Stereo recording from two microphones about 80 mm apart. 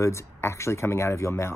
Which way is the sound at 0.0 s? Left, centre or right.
Left.